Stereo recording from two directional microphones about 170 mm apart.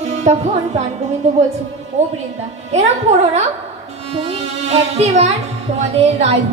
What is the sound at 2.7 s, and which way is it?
Speech, 40° right (ahead or behind).